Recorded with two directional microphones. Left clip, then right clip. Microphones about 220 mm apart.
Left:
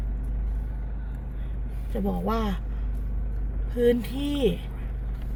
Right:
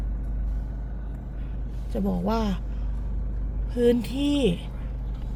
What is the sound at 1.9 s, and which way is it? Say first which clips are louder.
Speech: right 1 dB; 10° right (ahead or behind).